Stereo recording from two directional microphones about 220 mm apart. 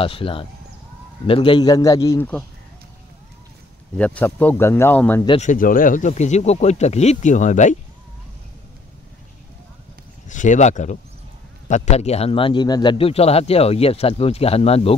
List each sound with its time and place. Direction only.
0.0 s a man's voice: 25° left (ahead or behind); by 2.4 s 10° left (ahead or behind)
3.9 s speech: 5° left (ahead or behind)
5.2 s a man's voice: 25° left (ahead or behind)
5.5 s speech: 40° left (ahead or behind)
10.2 s a man's voice: 35° left (ahead or behind)